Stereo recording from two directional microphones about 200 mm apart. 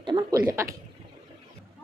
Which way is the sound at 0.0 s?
25° right (ahead or behind).